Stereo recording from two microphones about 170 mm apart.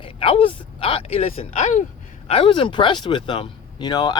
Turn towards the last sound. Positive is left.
turn(degrees=25)  # may be behind; listen again after turning